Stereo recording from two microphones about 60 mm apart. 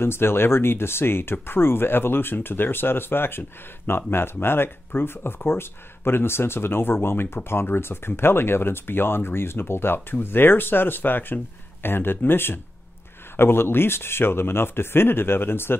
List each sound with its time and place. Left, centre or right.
0.0 s speech: left